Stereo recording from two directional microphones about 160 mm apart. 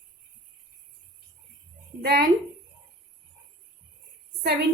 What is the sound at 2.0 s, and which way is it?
Speech, 75° right (ahead or behind).